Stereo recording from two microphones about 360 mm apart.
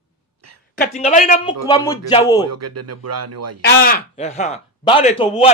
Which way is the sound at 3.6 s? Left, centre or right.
Left.